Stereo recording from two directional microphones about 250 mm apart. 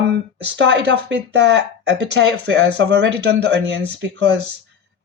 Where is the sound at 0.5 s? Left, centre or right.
Right.